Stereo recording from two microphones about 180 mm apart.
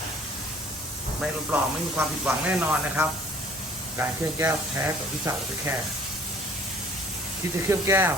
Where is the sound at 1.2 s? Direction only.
5° right (ahead or behind).